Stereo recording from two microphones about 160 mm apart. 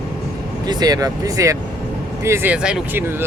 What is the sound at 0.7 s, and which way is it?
Speech, 25° right (ahead or behind).